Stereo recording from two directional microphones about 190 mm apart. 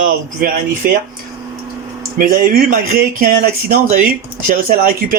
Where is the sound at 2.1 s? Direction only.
45° right (ahead or behind).